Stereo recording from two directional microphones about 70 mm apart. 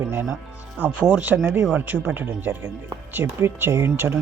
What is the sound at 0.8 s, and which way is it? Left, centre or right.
Speech, right.